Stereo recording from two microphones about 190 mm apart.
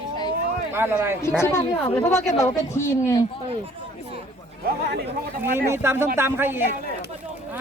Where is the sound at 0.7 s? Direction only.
10° right (ahead or behind).